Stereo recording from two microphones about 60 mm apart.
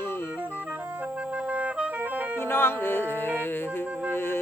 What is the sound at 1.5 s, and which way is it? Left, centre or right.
Music, right.